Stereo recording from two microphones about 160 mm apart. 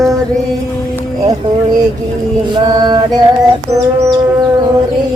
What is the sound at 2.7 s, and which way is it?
Mantra, 25° right (ahead or behind).